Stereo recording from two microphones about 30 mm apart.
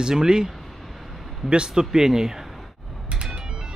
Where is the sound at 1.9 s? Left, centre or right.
Centre.